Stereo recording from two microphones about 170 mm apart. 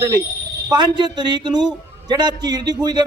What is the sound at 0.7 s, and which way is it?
A man's voice, 25° right (ahead or behind).